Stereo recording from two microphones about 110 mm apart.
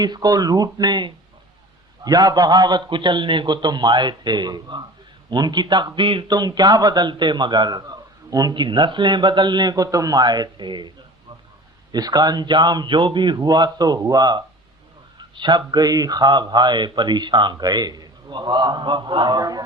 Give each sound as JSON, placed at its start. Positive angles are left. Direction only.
{"t": 0.0, "sound": "a man's voice", "side_deg": -40}